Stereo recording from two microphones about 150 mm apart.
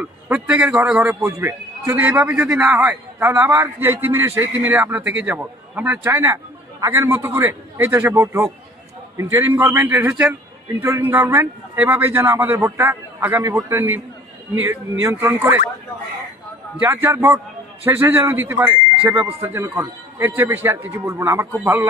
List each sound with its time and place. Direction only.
0.0 s a man's voice: 10° right (ahead or behind)
16.8 s a man's voice: 15° right (ahead or behind)